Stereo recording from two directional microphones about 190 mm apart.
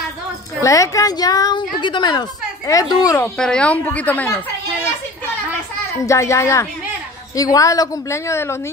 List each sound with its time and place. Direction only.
0.7 s a woman's voice: 15° left (ahead or behind)
3.3 s a woman's voice: 5° left (ahead or behind)
6.0 s a woman's voice: 15° left (ahead or behind)